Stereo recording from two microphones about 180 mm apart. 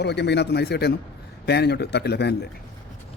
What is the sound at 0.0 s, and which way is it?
A man's voice, 70° left (ahead or behind).